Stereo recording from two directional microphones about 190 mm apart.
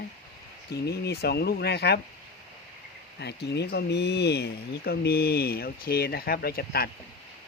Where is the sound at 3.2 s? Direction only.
60° left (ahead or behind).